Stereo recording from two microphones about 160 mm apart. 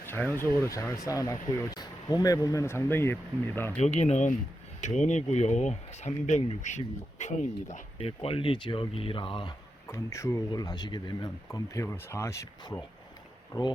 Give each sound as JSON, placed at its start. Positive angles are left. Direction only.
{"t": 0.0, "sound": "speech", "side_deg": 15}
{"t": 3.8, "sound": "speech", "side_deg": 45}
{"t": 9.8, "sound": "speech", "side_deg": 20}